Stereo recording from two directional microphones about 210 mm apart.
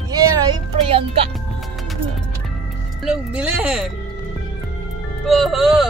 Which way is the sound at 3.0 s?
5° right (ahead or behind).